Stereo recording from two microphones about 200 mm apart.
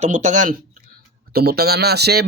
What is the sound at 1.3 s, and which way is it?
Speech, 50° right (ahead or behind).